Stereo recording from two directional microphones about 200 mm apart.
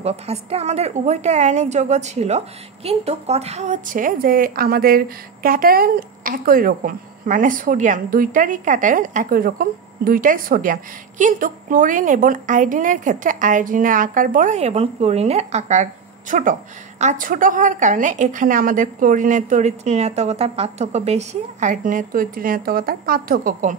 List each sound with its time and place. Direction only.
0.0 s a woman's voice: 30° right (ahead or behind)